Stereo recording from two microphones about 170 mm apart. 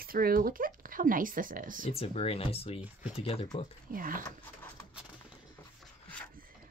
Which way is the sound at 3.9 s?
55° right (ahead or behind).